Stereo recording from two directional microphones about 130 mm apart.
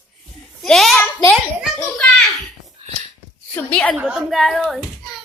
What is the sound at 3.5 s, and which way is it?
Speech, 10° left (ahead or behind).